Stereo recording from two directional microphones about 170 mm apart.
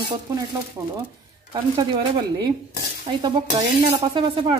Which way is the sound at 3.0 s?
25° right (ahead or behind).